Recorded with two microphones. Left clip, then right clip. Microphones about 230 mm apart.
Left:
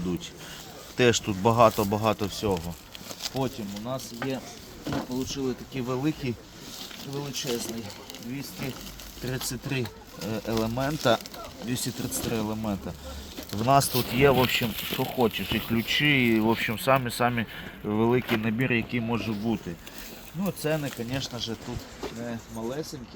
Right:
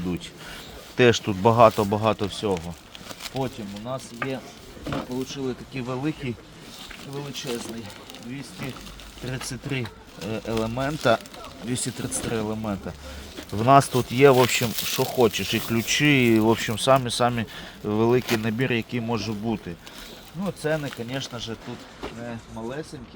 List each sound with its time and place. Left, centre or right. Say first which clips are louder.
0.9 s speech: right 4 dB; right; by 7.6 s centre
9.2 s speech: even; centre
10.5 s speech: right 2 dB; centre
11.7 s speech: right 2 dB; right
20.4 s speech: right 2 dB; centre
21.1 s speech: right 1 dB; centre
22.6 s speech: even; centre